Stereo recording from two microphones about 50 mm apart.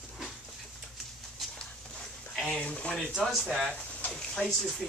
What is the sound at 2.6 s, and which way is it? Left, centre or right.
Speech, left.